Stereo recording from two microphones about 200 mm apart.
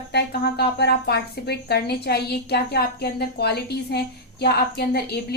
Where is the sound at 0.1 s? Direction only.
55° left (ahead or behind).